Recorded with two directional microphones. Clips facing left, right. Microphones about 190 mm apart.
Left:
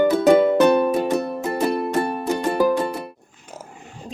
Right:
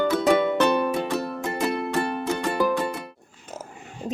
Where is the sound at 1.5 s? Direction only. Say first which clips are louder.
Left 4 dB; 40° left (ahead or behind).